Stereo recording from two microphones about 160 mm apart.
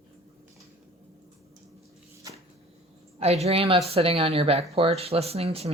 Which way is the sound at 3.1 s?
40° right (ahead or behind).